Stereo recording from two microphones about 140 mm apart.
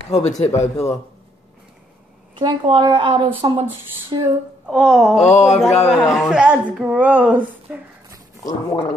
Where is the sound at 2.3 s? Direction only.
35° right (ahead or behind).